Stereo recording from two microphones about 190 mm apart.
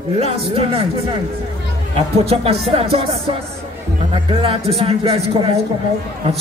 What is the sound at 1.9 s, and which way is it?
A man's voice, 30° right (ahead or behind).